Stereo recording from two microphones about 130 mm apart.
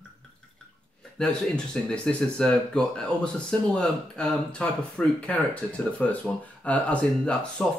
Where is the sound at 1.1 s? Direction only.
5° left (ahead or behind).